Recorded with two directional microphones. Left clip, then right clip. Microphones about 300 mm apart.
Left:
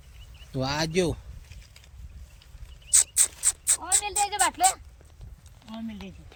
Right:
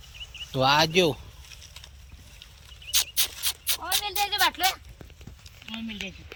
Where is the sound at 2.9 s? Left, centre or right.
Centre.